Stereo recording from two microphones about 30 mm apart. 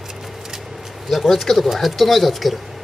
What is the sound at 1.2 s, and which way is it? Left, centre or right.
Speech, centre.